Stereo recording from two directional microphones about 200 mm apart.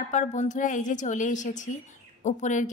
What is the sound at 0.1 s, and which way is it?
A woman's voice, 35° left (ahead or behind).